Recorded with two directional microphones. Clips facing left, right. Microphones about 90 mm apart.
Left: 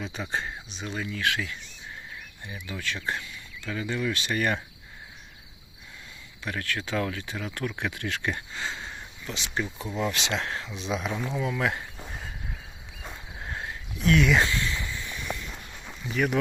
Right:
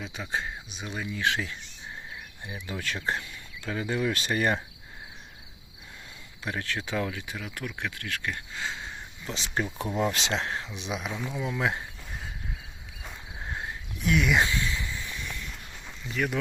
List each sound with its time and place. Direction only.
0.0 s speech: centre (ahead or behind)
1.3 s speech: 30° right (ahead or behind)
2.6 s speech: 35° right (ahead or behind)
6.4 s speech: 20° right (ahead or behind); by 7.8 s 5° right (ahead or behind)
7.8 s speech: 15° left (ahead or behind)
8.5 s a sound: centre (ahead or behind)
9.2 s speech: 35° right (ahead or behind)
10.3 s speech: 20° right (ahead or behind)
11.1 s speech: 15° left (ahead or behind)
11.3 s speech: 15° right (ahead or behind)
13.4 s a sound: 15° right (ahead or behind)
15.9 s speech: 5° left (ahead or behind)